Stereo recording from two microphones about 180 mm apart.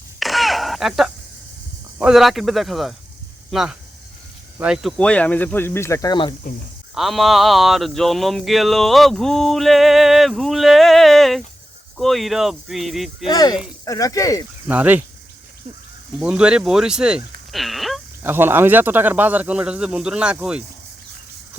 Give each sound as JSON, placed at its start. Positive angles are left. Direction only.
{"t": 0.2, "sound": "a sound", "side_deg": 0}
{"t": 2.0, "sound": "speech", "side_deg": -5}
{"t": 6.9, "sound": "speech", "side_deg": 0}
{"t": 13.2, "sound": "speech", "side_deg": 20}
{"t": 14.7, "sound": "speech", "side_deg": -10}
{"t": 16.2, "sound": "speech", "side_deg": -5}
{"t": 18.2, "sound": "speech", "side_deg": -10}